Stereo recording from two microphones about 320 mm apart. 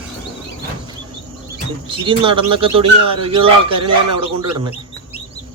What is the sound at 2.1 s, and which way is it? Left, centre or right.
Speech, centre.